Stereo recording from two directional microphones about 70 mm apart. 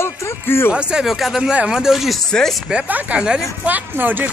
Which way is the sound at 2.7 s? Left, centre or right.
Centre.